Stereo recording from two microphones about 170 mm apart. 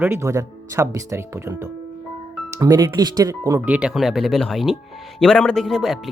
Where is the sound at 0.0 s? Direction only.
15° right (ahead or behind).